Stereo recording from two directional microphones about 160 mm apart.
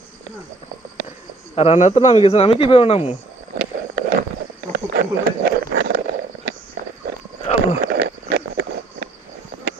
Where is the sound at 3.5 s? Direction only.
75° right (ahead or behind).